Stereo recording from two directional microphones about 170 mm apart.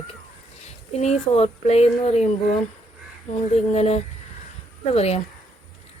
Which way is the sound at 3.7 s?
40° left (ahead or behind).